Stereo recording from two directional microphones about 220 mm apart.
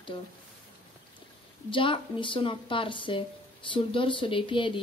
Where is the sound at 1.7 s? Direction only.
25° left (ahead or behind).